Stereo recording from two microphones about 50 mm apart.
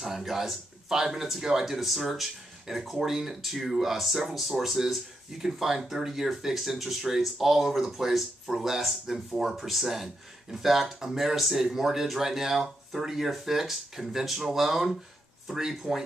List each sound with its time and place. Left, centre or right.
0.0 s speech: centre